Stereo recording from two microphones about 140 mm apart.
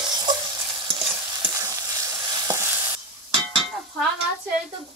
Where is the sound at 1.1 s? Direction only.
20° right (ahead or behind).